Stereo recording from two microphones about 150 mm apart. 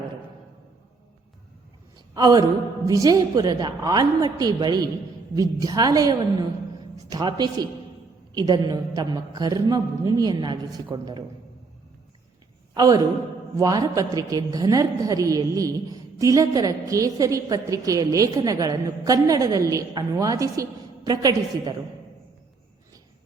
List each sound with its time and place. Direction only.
2.1 s a woman's voice: 25° right (ahead or behind)
12.7 s a woman's voice: 25° right (ahead or behind)